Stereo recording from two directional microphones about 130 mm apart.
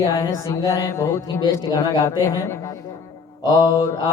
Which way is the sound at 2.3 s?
20° left (ahead or behind).